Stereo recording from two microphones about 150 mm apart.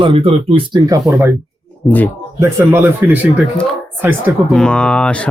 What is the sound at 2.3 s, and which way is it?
Speech, 15° right (ahead or behind).